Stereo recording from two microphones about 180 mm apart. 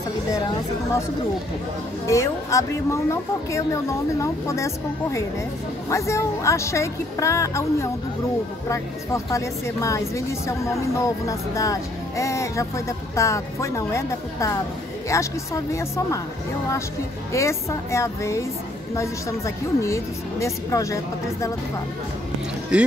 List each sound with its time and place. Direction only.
2.0 s a woman's voice: 15° left (ahead or behind)
17.3 s a woman's voice: 15° left (ahead or behind)
22.7 s speech: 5° right (ahead or behind)